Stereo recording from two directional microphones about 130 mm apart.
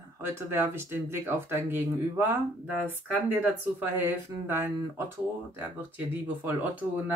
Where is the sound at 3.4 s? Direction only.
15° right (ahead or behind).